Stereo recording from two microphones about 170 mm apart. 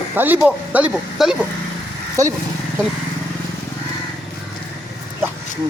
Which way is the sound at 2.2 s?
20° right (ahead or behind).